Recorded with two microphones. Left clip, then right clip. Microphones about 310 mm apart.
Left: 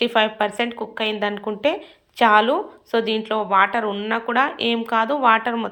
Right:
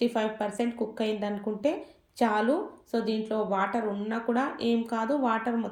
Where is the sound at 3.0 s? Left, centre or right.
Centre.